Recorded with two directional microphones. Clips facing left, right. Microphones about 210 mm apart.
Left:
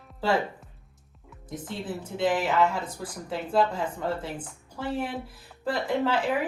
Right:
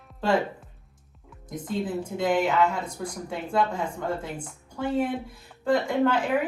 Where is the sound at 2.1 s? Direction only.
5° left (ahead or behind).